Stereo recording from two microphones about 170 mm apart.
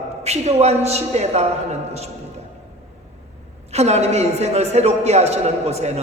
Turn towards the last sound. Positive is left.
turn(degrees=-40)  # may be behind; listen again after turning